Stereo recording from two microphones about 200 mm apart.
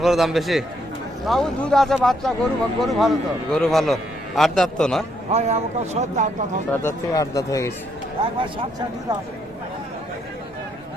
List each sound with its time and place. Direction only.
0.0 s speech: centre (ahead or behind)
5.3 s speech: 35° right (ahead or behind)
6.8 s speech: 15° left (ahead or behind)